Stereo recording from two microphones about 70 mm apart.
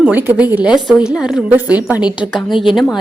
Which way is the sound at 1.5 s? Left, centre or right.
Right.